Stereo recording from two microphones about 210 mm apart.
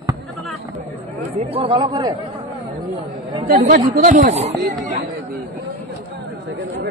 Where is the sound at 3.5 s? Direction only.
45° right (ahead or behind).